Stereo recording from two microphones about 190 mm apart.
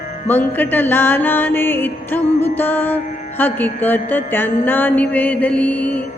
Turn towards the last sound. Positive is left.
turn(degrees=10)  # may be behind; listen again after turning